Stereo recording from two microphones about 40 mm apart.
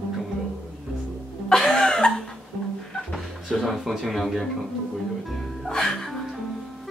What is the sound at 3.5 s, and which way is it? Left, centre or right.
Speech, centre.